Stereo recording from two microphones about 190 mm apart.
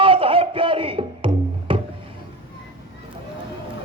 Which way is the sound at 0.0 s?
25° right (ahead or behind).